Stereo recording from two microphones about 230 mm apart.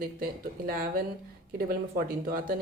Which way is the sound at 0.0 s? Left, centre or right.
Right.